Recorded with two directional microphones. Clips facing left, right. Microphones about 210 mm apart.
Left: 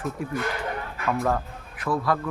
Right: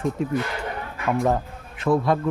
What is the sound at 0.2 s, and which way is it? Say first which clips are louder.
Speech: right 3 dB; 25° right (ahead or behind).